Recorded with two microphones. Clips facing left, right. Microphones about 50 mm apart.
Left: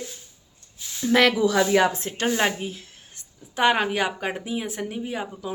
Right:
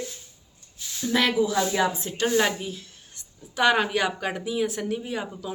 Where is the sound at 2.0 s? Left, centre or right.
Left.